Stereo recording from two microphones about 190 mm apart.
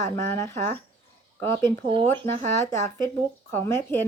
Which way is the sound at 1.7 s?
25° right (ahead or behind).